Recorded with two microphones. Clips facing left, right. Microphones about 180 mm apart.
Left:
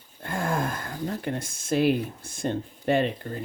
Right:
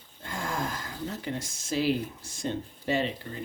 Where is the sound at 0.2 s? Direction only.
55° left (ahead or behind).